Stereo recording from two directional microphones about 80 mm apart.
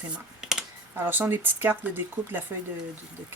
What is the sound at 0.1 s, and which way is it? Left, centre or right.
Computer keyboard, centre.